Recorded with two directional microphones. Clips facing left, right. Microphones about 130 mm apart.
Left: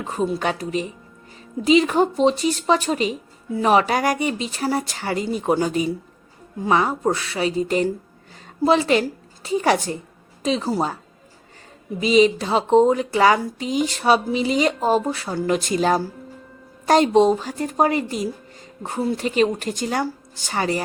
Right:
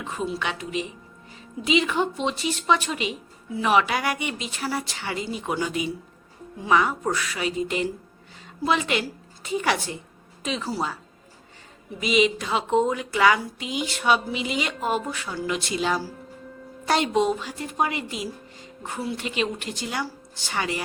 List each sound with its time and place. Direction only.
0.0 s speech: 40° left (ahead or behind)
11.9 s speech: 35° left (ahead or behind)